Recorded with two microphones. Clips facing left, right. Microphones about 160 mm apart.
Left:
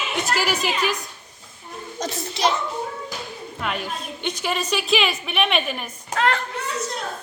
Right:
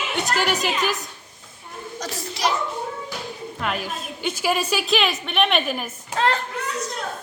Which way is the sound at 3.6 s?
Centre (ahead or behind).